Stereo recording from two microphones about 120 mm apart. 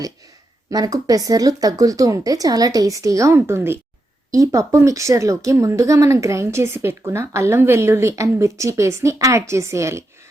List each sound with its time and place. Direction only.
0.7 s speech: 30° right (ahead or behind)